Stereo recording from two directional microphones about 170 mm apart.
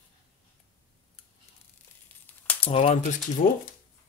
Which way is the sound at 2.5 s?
35° left (ahead or behind).